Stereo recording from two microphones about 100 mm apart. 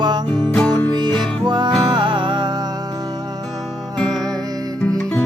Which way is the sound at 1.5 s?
50° right (ahead or behind).